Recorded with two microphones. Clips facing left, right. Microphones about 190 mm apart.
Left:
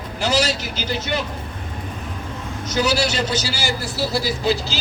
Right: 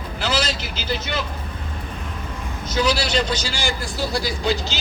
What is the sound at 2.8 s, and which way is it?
A man's voice, 10° left (ahead or behind).